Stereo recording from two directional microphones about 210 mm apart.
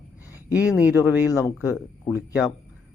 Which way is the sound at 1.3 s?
15° left (ahead or behind).